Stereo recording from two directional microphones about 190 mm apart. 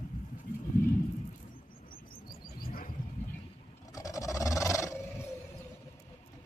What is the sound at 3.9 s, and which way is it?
Roaring cats, 15° left (ahead or behind).